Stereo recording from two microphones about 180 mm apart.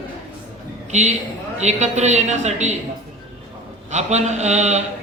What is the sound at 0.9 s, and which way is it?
A man's voice, 40° right (ahead or behind).